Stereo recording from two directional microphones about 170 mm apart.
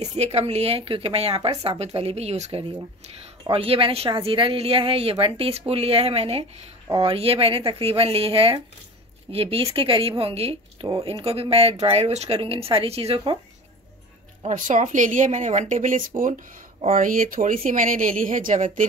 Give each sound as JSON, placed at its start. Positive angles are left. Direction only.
{"t": 0.0, "sound": "speech", "side_deg": -40}
{"t": 14.4, "sound": "speech", "side_deg": -45}